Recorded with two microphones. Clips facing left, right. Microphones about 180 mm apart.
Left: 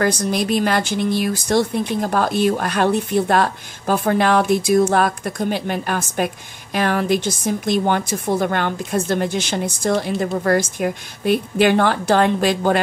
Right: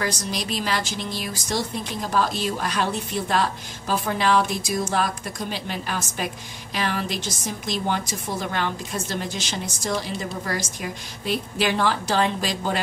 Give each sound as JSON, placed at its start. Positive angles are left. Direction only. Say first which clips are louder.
{"t": 0.0, "sound": "speech", "louder": "left 9 dB", "side_deg": 55}